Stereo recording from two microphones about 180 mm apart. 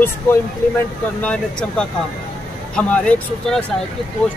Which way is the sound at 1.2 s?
5° left (ahead or behind).